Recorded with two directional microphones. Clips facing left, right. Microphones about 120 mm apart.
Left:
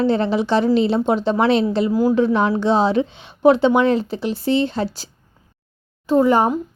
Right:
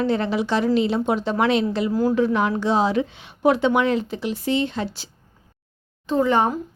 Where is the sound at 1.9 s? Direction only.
15° left (ahead or behind).